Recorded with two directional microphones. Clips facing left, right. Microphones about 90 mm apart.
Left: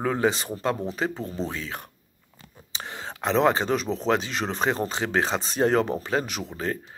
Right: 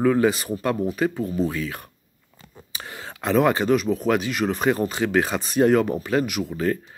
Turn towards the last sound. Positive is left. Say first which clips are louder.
# right 6 dB
turn(degrees=25)  # may be behind; listen again after turning